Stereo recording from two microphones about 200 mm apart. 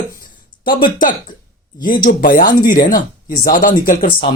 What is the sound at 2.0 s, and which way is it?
Speech, 45° left (ahead or behind).